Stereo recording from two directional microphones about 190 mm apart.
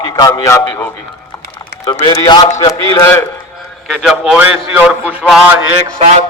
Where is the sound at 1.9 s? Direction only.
20° left (ahead or behind).